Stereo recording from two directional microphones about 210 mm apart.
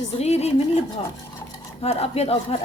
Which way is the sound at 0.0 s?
30° left (ahead or behind).